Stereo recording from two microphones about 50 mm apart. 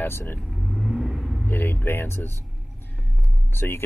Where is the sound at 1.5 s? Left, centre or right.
Left.